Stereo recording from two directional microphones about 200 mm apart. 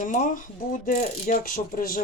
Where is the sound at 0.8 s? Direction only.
45° left (ahead or behind).